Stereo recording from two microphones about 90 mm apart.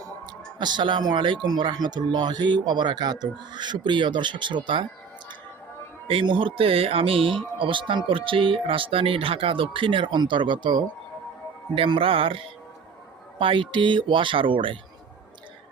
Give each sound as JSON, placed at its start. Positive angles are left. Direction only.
{"t": 0.6, "sound": "speech", "side_deg": -60}
{"t": 6.1, "sound": "speech", "side_deg": -75}
{"t": 11.7, "sound": "music", "side_deg": -85}
{"t": 13.4, "sound": "speech", "side_deg": -75}